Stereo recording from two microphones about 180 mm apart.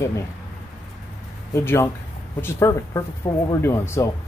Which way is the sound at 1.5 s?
15° left (ahead or behind).